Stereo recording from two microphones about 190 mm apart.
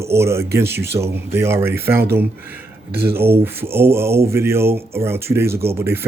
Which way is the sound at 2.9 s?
55° right (ahead or behind).